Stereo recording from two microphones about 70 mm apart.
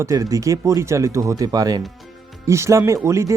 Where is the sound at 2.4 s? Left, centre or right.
Right.